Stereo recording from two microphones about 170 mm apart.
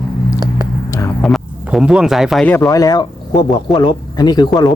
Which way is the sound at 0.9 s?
15° left (ahead or behind).